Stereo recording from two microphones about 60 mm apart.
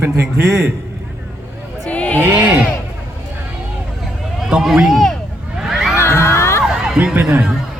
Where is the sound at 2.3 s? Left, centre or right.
Right.